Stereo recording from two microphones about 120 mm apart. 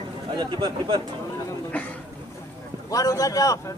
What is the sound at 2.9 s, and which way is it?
Speech, 30° left (ahead or behind).